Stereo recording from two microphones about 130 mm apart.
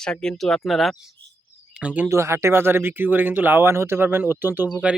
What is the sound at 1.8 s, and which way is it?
Speech, 10° right (ahead or behind).